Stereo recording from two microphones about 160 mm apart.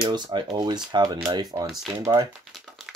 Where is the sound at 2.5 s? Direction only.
Centre (ahead or behind).